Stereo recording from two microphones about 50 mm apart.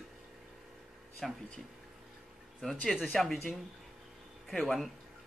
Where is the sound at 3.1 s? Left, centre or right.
Centre.